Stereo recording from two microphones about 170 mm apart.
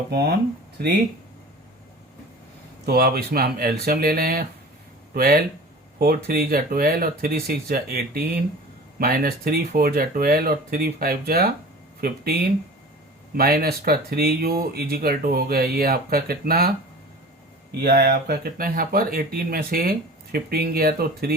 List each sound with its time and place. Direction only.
0.1 s speech: 70° right (ahead or behind)
2.8 s speech: 65° right (ahead or behind)
17.8 s speech: 70° right (ahead or behind)